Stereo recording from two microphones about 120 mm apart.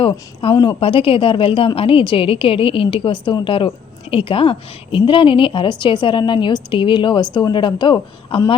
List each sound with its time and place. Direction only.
0.5 s a woman's voice: 40° left (ahead or behind)